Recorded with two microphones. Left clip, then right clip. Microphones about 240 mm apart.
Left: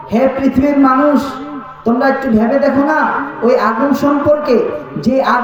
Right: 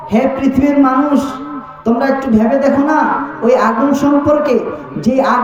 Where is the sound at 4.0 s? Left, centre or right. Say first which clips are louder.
Even; right.